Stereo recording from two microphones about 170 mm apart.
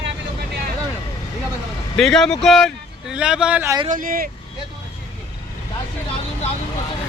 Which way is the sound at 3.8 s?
55° right (ahead or behind).